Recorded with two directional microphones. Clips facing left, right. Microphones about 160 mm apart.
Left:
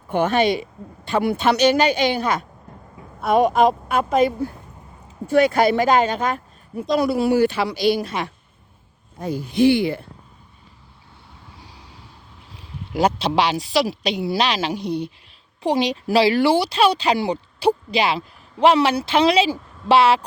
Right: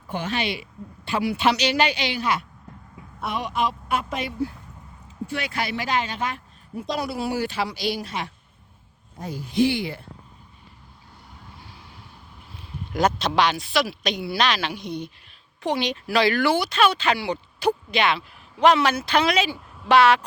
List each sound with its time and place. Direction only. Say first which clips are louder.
0.1 s speech: left 9 dB; 55° left (ahead or behind)
13.2 s speech: left 2 dB; 30° left (ahead or behind)
19.5 s a sound: left 5 dB; 5° right (ahead or behind)
19.9 s speech: left 2 dB; 30° left (ahead or behind)